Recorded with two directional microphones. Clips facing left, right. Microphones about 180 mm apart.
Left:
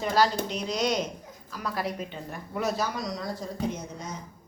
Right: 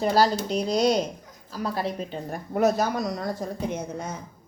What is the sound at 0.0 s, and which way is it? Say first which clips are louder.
Speech: right 3 dB; 35° right (ahead or behind).